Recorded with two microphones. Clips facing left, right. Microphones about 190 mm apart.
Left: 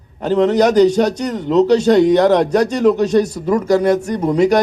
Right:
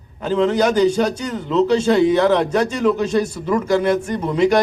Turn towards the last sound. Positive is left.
turn(degrees=45)  # may be behind; listen again after turning